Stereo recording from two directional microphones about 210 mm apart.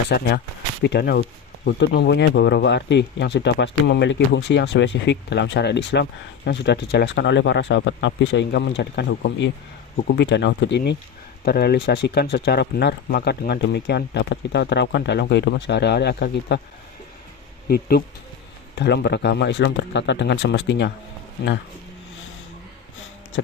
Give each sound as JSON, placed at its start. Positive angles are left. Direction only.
{"t": 0.1, "sound": "speech", "side_deg": 50}
{"t": 17.7, "sound": "speech", "side_deg": 45}